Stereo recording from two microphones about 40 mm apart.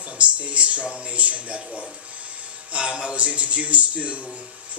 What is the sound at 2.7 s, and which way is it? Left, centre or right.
A man's voice, right.